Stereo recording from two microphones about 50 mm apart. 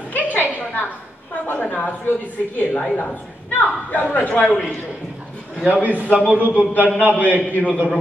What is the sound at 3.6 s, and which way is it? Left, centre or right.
A woman's voice, left.